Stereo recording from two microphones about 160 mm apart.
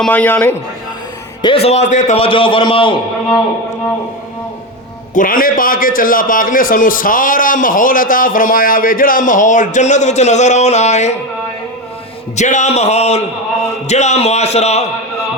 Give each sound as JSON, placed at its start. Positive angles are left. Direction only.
{"t": 0.0, "sound": "a man's voice", "side_deg": 10}
{"t": 1.4, "sound": "a man's voice", "side_deg": 35}
{"t": 5.1, "sound": "a man's voice", "side_deg": 60}
{"t": 12.4, "sound": "a man's voice", "side_deg": 50}